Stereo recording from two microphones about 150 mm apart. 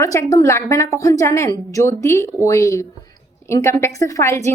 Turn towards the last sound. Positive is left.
turn(degrees=20)  # may be behind; listen again after turning